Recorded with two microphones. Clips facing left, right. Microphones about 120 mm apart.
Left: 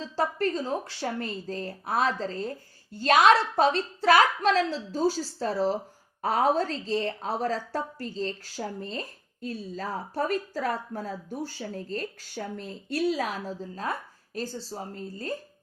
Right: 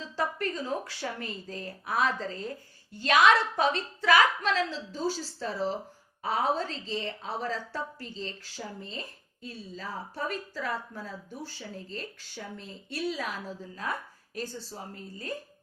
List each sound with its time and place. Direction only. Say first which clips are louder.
0.0 s a woman's voice: left 4 dB; 30° left (ahead or behind)